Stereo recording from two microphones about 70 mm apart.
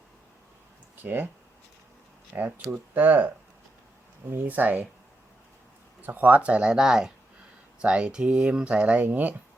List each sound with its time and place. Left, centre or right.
1.0 s speech: right
2.3 s speech: right
6.0 s speech: right